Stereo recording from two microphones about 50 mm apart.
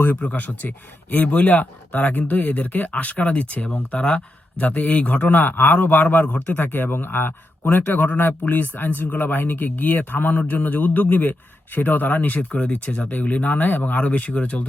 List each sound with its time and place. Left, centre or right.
0.2 s speech: left